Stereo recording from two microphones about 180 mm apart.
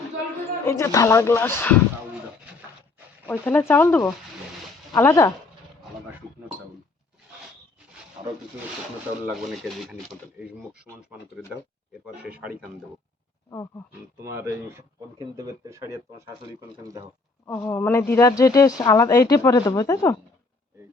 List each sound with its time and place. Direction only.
0.6 s speech: 15° left (ahead or behind)
3.2 s speech: 10° left (ahead or behind)
8.2 s rub: 35° right (ahead or behind)
9.4 s speech: centre (ahead or behind)
12.0 s speech: 5° right (ahead or behind)
14.2 s speech: 15° right (ahead or behind)
17.4 s speech: 15° left (ahead or behind)